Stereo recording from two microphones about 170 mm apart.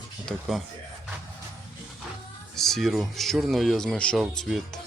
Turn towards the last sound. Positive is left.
turn(degrees=0)  # may be behind; listen again after turning